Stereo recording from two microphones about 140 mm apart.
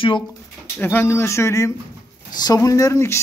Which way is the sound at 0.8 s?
15° left (ahead or behind).